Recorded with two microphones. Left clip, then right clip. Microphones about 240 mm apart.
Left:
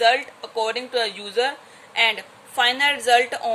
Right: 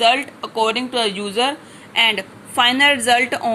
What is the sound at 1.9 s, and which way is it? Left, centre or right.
Speech, centre.